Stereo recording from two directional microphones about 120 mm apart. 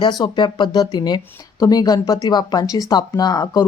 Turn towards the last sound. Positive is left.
turn(degrees=30)  # may be behind; listen again after turning